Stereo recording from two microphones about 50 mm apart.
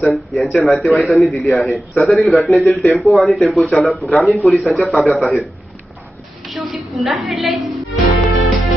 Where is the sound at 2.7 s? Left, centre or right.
Left.